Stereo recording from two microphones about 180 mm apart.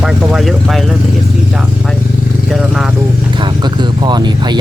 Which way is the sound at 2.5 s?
Centre (ahead or behind).